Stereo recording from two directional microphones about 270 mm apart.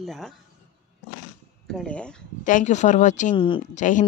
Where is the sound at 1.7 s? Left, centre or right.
Centre.